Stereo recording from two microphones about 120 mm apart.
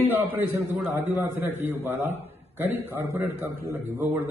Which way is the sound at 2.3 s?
15° right (ahead or behind).